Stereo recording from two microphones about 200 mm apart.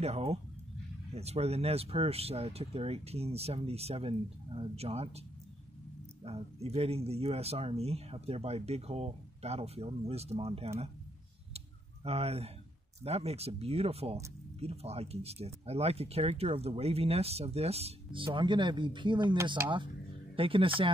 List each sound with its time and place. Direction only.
0.0 s speech: 30° right (ahead or behind)
6.2 s speech: 30° right (ahead or behind)
11.5 s a sound: 30° right (ahead or behind)
13.0 s speech: 30° right (ahead or behind)